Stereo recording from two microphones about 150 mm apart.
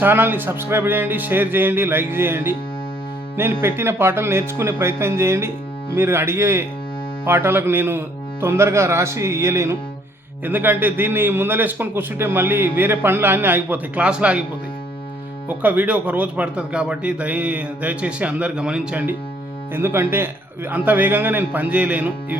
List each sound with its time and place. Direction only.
0.0 s a man's voice: 15° right (ahead or behind)
15.4 s a man's voice: 10° right (ahead or behind)